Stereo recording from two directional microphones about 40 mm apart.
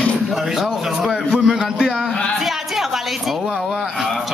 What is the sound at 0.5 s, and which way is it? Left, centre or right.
A man's voice, centre.